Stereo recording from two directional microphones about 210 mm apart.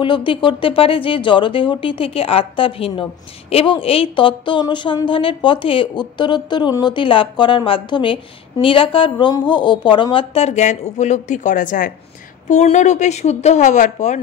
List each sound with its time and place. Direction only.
0.0 s speech: 25° left (ahead or behind)